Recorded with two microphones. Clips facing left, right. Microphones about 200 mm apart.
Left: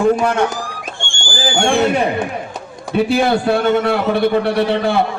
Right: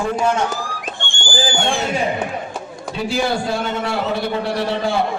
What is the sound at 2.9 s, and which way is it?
A man's voice, 60° left (ahead or behind).